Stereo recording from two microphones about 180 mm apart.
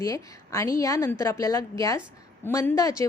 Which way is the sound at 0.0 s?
15° left (ahead or behind).